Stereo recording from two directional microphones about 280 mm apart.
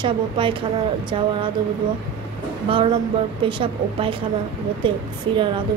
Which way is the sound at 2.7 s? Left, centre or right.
Centre.